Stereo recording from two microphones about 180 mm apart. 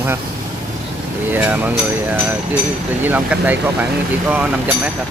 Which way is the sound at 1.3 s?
10° right (ahead or behind).